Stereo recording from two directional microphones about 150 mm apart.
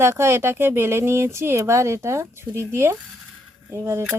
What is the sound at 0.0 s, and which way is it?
Speech, 15° right (ahead or behind).